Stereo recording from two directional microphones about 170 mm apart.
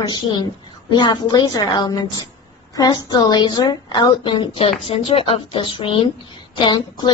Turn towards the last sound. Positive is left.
turn(degrees=25)  # may be behind; listen again after turning